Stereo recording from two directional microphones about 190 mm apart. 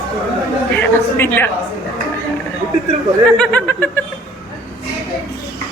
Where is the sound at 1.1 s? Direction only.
10° left (ahead or behind).